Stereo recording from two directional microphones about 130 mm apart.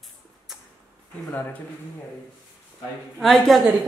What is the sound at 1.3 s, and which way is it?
Speech, 15° left (ahead or behind).